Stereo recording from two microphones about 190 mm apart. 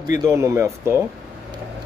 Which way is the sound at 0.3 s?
15° right (ahead or behind).